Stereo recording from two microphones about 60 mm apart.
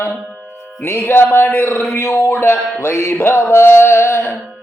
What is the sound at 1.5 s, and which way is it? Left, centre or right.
Speech, left.